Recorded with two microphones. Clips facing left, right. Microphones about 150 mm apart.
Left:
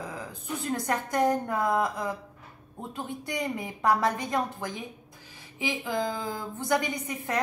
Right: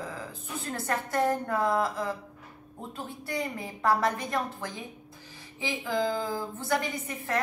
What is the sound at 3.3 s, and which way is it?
A woman's voice, 20° left (ahead or behind).